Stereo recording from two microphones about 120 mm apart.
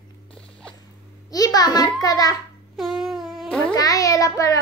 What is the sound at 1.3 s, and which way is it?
A child's voice, 30° left (ahead or behind).